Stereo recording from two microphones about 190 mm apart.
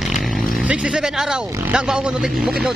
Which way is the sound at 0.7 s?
5° right (ahead or behind).